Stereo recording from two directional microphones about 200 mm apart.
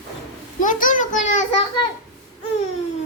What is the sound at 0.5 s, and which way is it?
Speech, 40° left (ahead or behind).